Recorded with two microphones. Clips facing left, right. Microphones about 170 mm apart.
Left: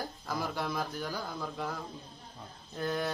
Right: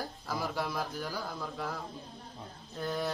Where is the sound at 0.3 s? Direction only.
5° right (ahead or behind).